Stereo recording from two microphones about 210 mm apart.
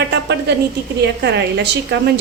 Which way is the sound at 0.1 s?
55° right (ahead or behind).